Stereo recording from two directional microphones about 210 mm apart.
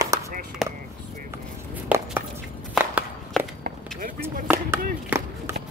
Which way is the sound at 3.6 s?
45° right (ahead or behind).